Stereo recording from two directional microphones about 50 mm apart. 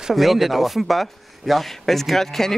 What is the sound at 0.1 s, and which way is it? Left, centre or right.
Speech, centre.